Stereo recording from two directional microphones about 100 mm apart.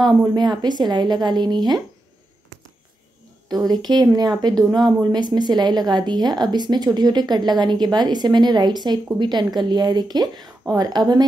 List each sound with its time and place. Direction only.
0.0 s speech: 45° right (ahead or behind)
3.4 s speech: 45° right (ahead or behind)